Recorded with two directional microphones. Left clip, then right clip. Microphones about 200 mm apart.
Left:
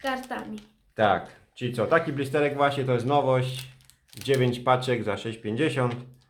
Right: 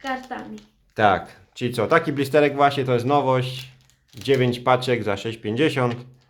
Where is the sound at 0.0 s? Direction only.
40° left (ahead or behind).